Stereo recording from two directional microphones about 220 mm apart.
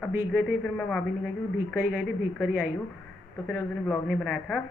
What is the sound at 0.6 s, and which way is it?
Speech, 5° left (ahead or behind).